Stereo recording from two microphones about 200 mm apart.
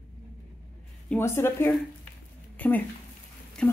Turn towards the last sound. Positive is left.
turn(degrees=5)  # may be behind; listen again after turning